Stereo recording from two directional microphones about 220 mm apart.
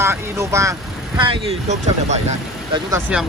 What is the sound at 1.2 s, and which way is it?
Speech, 25° right (ahead or behind).